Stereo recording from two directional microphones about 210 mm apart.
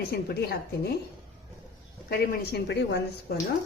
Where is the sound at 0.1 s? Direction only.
50° left (ahead or behind).